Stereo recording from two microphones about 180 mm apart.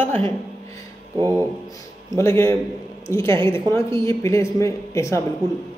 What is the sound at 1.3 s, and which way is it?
A man's voice, 15° left (ahead or behind).